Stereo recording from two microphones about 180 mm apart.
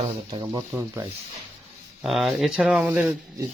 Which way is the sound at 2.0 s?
Centre (ahead or behind).